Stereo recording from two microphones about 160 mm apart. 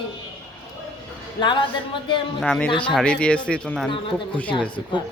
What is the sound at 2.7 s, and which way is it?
Speech, 30° left (ahead or behind).